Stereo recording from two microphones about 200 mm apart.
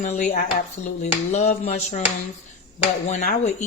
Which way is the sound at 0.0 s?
35° left (ahead or behind).